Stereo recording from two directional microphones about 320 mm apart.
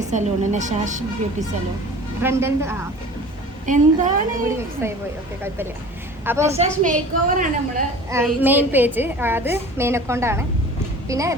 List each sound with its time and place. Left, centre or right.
0.1 s a woman's voice: right
2.2 s a woman's voice: centre
3.7 s a woman's voice: right
4.4 s a woman's voice: centre
6.2 s a woman's voice: centre
6.5 s a woman's voice: right
8.1 s a woman's voice: centre